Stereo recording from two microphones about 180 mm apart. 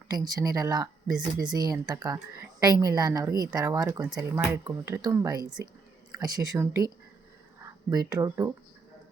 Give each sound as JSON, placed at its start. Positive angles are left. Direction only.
{"t": 0.1, "sound": "speech", "side_deg": -20}